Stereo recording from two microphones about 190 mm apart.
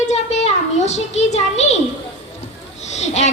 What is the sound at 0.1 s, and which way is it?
A child's voice, 35° left (ahead or behind).